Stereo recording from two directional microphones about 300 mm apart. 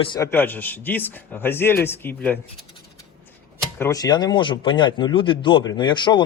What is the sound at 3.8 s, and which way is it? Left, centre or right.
Speech, centre.